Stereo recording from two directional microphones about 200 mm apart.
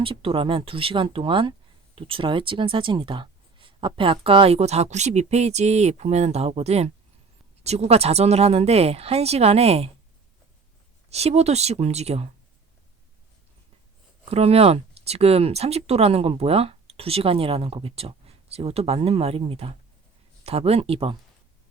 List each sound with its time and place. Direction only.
0.0 s speech: 25° right (ahead or behind)
11.1 s speech: 30° right (ahead or behind)
14.3 s speech: 30° right (ahead or behind)